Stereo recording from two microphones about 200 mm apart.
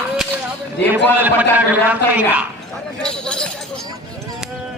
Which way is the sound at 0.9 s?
10° right (ahead or behind).